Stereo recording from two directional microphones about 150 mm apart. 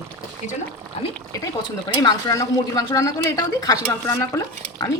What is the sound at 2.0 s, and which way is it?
Speech, 25° left (ahead or behind).